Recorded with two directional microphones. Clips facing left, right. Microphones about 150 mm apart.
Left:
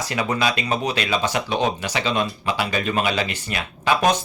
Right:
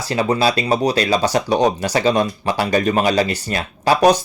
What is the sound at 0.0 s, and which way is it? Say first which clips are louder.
Speech: right 5 dB; 30° right (ahead or behind).